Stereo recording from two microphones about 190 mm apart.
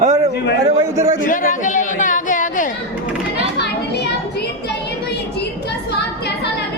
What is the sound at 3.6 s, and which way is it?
Children playing, 60° left (ahead or behind).